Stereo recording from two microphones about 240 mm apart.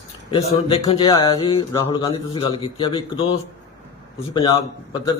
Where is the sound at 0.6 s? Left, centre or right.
Left.